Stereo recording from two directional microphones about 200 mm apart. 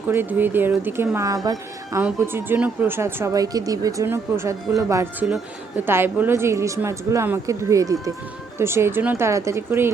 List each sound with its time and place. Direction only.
0.1 s a woman's voice: 10° right (ahead or behind)